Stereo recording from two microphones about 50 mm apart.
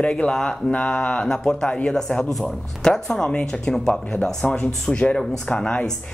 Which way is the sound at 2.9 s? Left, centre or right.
Centre.